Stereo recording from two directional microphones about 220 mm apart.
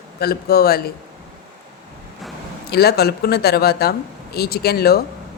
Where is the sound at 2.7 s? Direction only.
45° left (ahead or behind).